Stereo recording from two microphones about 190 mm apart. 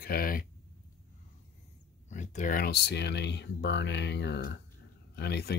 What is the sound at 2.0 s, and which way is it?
Speech, 40° left (ahead or behind).